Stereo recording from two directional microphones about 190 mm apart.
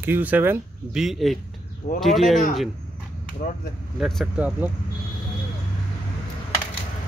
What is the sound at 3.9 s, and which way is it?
Speech, centre (ahead or behind).